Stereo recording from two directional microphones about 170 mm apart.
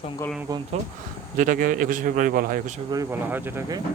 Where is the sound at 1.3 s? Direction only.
50° right (ahead or behind).